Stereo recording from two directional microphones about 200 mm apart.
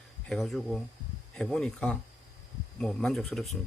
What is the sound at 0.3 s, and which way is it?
Speech, centre (ahead or behind).